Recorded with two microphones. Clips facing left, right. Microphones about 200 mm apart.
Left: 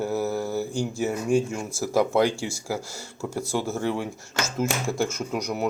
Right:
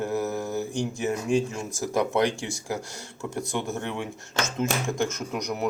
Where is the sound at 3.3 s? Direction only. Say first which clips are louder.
Left 3 dB; 35° left (ahead or behind).